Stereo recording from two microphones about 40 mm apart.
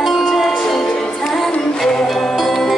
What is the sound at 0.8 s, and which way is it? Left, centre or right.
Music, centre.